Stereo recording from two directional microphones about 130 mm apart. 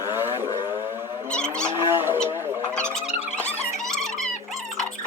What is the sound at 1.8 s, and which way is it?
Wild animals, 20° right (ahead or behind).